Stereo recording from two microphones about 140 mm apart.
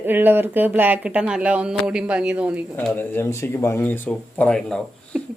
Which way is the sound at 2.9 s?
15° left (ahead or behind).